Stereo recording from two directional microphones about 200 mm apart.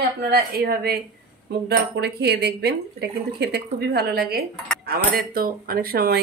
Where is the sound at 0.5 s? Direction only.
50° right (ahead or behind).